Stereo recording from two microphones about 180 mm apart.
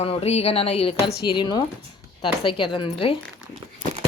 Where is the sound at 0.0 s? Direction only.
35° left (ahead or behind).